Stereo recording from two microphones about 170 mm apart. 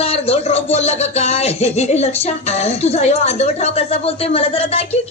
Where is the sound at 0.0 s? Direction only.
35° left (ahead or behind).